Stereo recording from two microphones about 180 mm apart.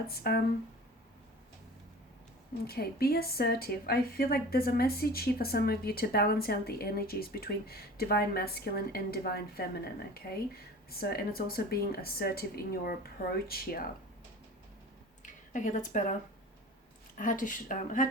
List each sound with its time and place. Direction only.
0.2 s a woman's voice: 60° left (ahead or behind)
2.6 s a woman's voice: 60° left (ahead or behind)
15.2 s speech: 45° left (ahead or behind)
17.2 s speech: 45° left (ahead or behind)